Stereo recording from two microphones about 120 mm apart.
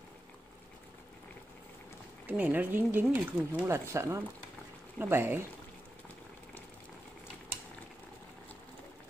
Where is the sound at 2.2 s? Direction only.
15° right (ahead or behind).